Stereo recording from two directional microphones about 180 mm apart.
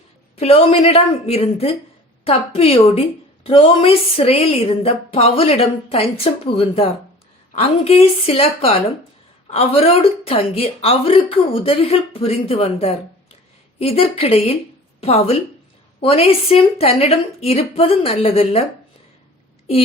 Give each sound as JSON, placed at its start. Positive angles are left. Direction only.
{"t": 0.3, "sound": "a woman's voice", "side_deg": 35}